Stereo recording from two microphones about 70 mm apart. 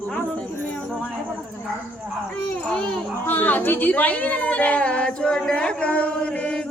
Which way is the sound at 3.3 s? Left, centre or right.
Left.